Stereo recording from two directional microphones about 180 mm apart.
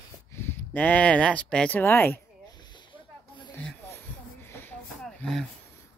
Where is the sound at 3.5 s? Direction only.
10° left (ahead or behind).